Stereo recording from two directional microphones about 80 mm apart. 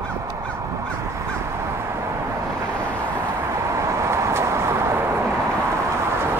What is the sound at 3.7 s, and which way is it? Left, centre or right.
Vehicle, right.